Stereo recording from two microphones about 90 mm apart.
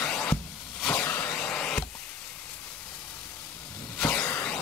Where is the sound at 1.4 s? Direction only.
10° left (ahead or behind).